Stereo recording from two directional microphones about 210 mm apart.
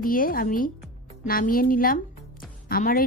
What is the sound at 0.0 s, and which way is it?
A woman's voice, 40° left (ahead or behind).